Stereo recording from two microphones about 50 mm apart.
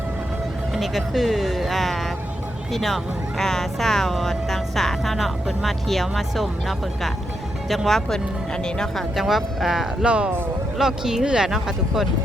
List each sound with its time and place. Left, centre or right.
0.7 s speech: centre
9.0 s speech: centre
10.0 s speech: right
10.8 s speech: centre